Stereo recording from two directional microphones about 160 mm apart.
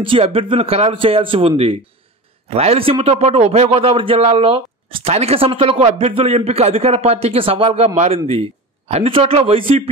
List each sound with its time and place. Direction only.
0.0 s speech: 35° right (ahead or behind)